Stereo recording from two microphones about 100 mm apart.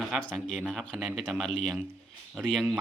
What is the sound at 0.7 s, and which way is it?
Speech, 5° left (ahead or behind).